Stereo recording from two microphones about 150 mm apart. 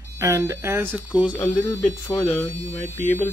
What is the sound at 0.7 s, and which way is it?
Speech, centre (ahead or behind).